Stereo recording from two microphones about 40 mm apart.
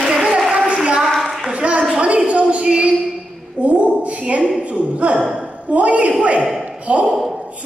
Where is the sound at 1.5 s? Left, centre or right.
Right.